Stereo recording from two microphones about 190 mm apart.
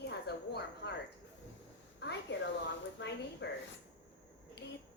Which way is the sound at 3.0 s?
75° left (ahead or behind).